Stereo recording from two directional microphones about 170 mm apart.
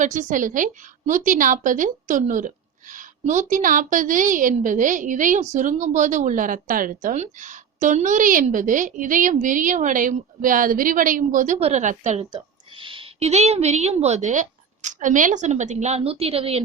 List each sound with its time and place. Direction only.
0.0 s a woman's voice: 50° right (ahead or behind)
12.2 s a woman's voice: 30° right (ahead or behind)